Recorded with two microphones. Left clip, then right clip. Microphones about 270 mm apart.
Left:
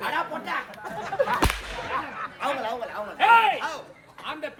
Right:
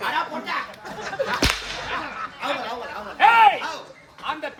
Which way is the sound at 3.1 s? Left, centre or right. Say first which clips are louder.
Right 4 dB; centre.